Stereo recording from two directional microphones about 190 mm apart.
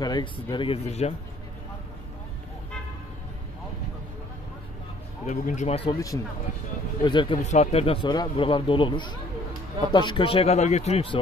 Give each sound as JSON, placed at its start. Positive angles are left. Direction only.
{"t": 0.0, "sound": "speech", "side_deg": 20}
{"t": 5.2, "sound": "speech", "side_deg": 40}
{"t": 5.9, "sound": "speech", "side_deg": 15}
{"t": 7.3, "sound": "speech", "side_deg": 35}